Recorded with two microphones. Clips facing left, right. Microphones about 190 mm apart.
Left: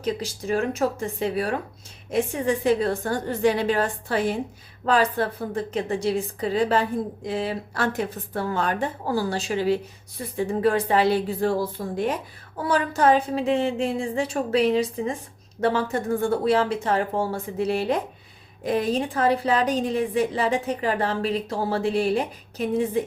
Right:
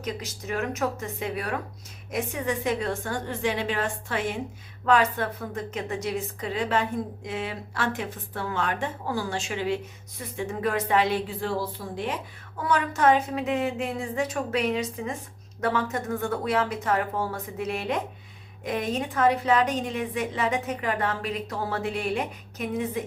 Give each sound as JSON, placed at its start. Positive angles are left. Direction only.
{"t": 0.0, "sound": "a woman's voice", "side_deg": 30}
{"t": 12.5, "sound": "a woman's voice", "side_deg": 35}